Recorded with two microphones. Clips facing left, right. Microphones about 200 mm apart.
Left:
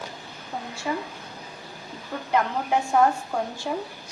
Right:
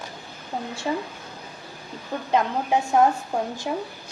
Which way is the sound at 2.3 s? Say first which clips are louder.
Right 1 dB; 20° right (ahead or behind).